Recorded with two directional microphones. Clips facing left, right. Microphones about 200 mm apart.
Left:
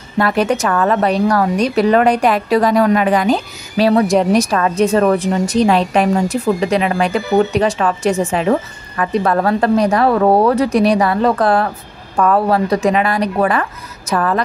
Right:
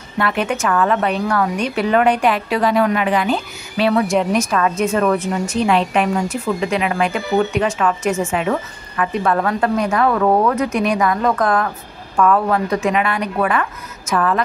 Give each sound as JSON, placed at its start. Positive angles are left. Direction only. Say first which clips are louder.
{"t": 0.2, "sound": "a woman's voice", "louder": "left 4 dB", "side_deg": 40}